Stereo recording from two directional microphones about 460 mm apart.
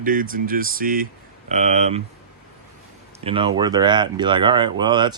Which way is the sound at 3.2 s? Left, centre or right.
Centre.